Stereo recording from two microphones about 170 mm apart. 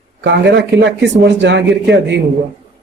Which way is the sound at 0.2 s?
90° right.